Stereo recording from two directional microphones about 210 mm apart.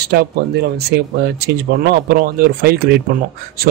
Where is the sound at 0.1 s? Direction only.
50° right (ahead or behind).